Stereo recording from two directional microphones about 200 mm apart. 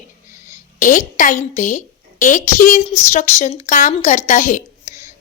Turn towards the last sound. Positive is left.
turn(degrees=40)  # may be behind; listen again after turning